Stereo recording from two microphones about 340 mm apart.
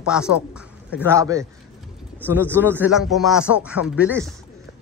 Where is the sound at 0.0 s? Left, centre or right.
Centre.